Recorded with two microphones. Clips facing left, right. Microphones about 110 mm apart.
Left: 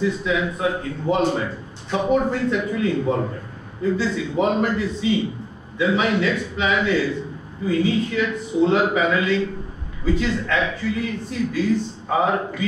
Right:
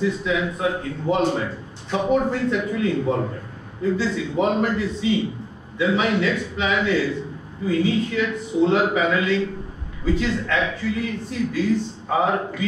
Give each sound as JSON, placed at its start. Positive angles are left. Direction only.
{"t": 0.0, "sound": "a man's voice", "side_deg": 25}